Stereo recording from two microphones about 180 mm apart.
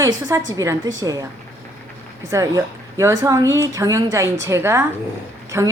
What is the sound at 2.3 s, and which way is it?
A woman's voice, 20° right (ahead or behind).